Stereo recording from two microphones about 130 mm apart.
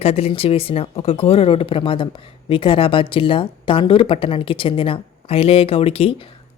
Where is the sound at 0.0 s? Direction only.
50° left (ahead or behind).